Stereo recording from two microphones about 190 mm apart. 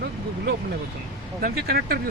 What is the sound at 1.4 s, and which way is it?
Speech, 50° right (ahead or behind).